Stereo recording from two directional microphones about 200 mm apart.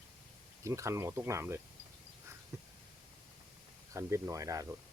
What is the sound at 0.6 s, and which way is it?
Speech, 15° right (ahead or behind).